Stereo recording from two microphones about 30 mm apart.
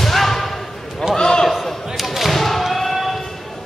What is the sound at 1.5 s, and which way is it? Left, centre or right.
Slam, centre.